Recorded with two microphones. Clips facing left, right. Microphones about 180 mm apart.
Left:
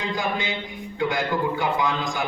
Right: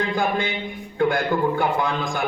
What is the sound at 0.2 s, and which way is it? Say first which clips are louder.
A man's voice: right 4 dB; 55° right (ahead or behind).